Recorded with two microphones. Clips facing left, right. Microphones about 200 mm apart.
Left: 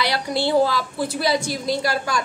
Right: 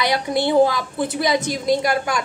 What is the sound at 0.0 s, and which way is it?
A woman's voice, 20° right (ahead or behind).